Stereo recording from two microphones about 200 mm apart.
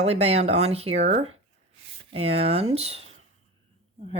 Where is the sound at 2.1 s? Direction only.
30° right (ahead or behind).